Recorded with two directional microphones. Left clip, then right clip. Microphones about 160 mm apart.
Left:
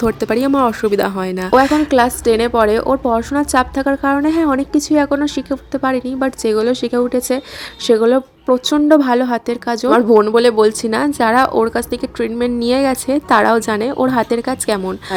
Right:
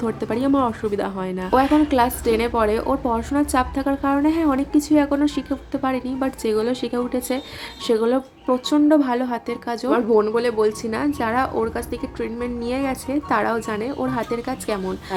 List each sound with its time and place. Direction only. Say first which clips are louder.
0.0 s a woman's voice: left 7 dB; 35° left (ahead or behind)
9.9 s speech: left 7 dB; 55° left (ahead or behind)